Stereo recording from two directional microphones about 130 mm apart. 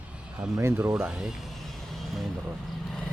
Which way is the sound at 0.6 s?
20° right (ahead or behind).